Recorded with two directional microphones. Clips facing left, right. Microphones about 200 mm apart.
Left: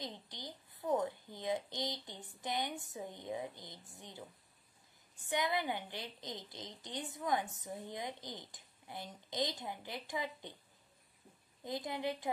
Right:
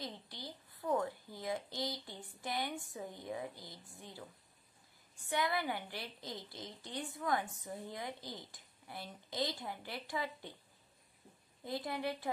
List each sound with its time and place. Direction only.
0.0 s a woman's voice: 20° left (ahead or behind)
5.3 s a woman's voice: 20° left (ahead or behind)
11.6 s a woman's voice: 20° left (ahead or behind)